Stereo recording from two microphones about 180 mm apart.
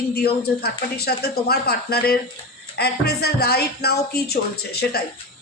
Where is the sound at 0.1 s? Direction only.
60° left (ahead or behind).